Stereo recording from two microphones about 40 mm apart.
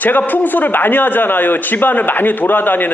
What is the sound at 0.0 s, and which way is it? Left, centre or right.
A man's voice, left.